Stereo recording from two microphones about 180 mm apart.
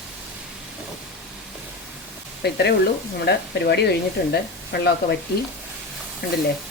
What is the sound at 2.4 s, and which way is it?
Speech, 70° left (ahead or behind).